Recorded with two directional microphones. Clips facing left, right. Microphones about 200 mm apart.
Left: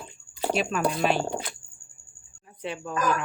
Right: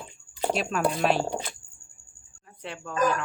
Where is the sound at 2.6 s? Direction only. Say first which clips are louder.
Left 5 dB; 15° left (ahead or behind).